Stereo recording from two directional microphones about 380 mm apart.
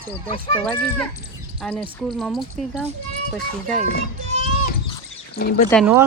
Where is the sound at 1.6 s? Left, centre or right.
Centre.